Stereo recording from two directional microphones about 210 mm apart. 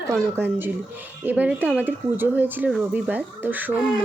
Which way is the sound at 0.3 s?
10° right (ahead or behind).